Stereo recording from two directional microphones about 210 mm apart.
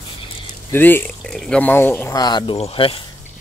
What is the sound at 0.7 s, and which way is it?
Speech, 10° left (ahead or behind).